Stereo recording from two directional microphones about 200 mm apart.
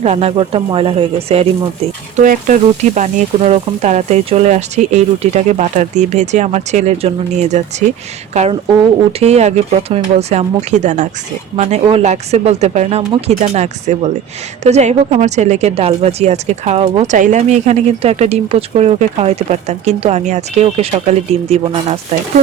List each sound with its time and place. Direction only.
0.0 s speech: 30° right (ahead or behind)